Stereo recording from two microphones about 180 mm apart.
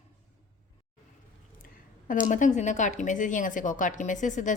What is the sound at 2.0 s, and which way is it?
Speech, 45° left (ahead or behind).